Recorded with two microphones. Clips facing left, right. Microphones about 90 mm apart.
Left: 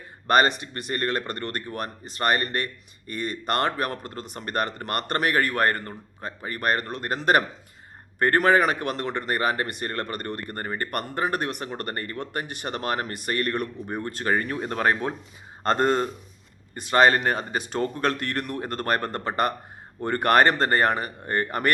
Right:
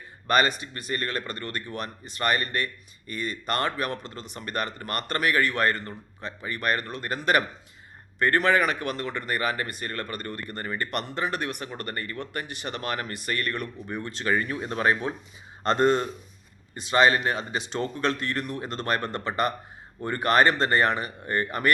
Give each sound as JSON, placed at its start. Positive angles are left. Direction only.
{"t": 0.3, "sound": "speech", "side_deg": 50}